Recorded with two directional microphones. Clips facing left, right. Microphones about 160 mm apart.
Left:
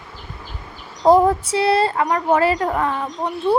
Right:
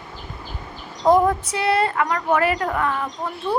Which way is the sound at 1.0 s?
30° left (ahead or behind).